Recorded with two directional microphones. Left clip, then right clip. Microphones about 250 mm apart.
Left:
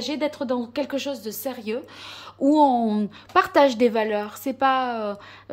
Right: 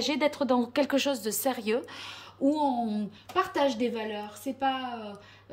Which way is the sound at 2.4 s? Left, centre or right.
Centre.